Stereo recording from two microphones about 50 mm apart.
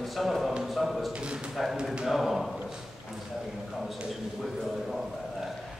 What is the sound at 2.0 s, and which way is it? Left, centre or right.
Speech, centre.